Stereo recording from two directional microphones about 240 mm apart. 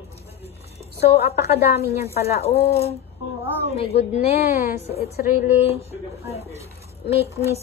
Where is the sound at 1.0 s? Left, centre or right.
Left.